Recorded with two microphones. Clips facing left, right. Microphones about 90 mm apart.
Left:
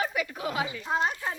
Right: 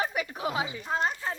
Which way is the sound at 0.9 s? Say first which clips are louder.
Left 1 dB; 5° left (ahead or behind).